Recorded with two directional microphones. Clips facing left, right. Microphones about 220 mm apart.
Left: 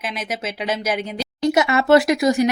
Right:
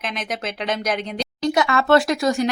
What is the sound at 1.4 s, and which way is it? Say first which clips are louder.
Speech: left 2 dB; 20° left (ahead or behind).